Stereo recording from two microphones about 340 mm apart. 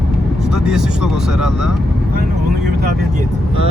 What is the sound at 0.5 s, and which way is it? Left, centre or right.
Speech, centre.